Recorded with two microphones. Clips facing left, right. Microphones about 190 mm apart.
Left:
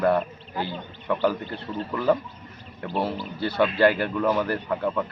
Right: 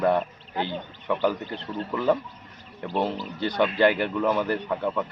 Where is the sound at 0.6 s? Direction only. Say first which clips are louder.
Right 1 dB; 15° right (ahead or behind).